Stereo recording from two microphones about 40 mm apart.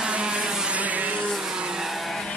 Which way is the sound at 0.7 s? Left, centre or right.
Right.